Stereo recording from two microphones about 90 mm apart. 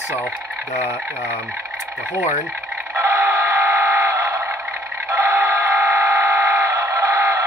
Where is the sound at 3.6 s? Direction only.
20° right (ahead or behind).